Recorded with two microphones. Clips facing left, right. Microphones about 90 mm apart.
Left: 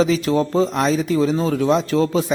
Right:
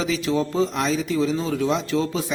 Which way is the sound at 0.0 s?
45° left (ahead or behind).